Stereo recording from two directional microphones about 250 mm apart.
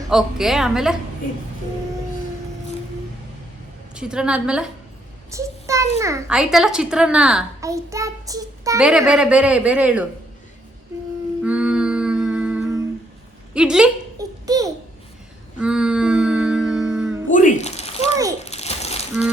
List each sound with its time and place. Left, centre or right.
0.1 s a woman's voice: centre
3.9 s a woman's voice: centre
5.3 s child singing: centre
6.0 s a woman's voice: centre
8.8 s a woman's voice: centre
11.4 s humming: centre
13.5 s a woman's voice: centre
14.2 s a sound: centre
15.6 s humming: centre
17.3 s a sound: left